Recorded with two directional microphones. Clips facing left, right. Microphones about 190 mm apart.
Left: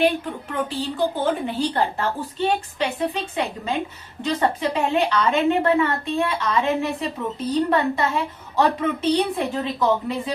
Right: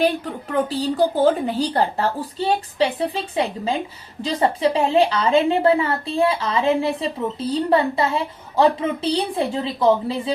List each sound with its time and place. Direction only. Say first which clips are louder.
0.5 s a woman's voice: right 6 dB; 40° right (ahead or behind)